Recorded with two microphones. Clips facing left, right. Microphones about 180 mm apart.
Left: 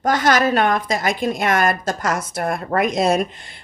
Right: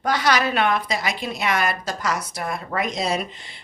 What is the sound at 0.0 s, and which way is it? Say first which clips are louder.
Speech: left 4 dB; 45° left (ahead or behind).